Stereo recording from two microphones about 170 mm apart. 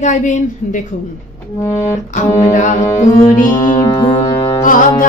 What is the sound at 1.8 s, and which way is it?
A woman's voice, 45° left (ahead or behind).